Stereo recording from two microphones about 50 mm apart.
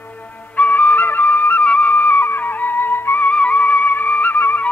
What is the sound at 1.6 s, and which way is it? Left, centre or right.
Music, left.